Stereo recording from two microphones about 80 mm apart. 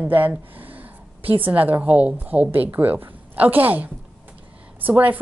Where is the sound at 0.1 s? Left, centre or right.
Right.